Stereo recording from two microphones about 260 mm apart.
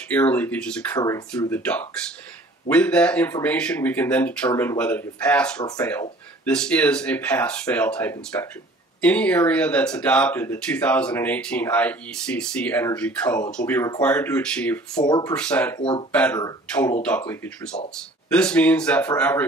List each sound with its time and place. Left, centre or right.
0.1 s speech: centre
15.0 s speech: centre
15.3 s speech: centre
15.8 s speech: centre
16.1 s speech: centre